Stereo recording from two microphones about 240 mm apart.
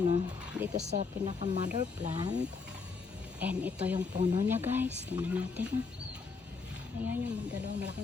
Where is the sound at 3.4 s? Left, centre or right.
Centre.